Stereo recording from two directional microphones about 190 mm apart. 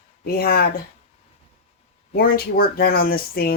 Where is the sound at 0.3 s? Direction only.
50° left (ahead or behind).